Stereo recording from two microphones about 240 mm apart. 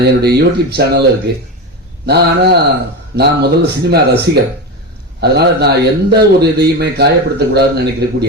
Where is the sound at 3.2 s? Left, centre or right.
Right.